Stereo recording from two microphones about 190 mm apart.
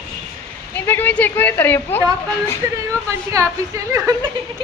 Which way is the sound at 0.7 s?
10° left (ahead or behind).